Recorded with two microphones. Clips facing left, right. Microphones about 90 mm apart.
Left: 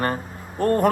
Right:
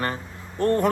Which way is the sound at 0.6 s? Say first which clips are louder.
Left 1 dB; 45° left (ahead or behind).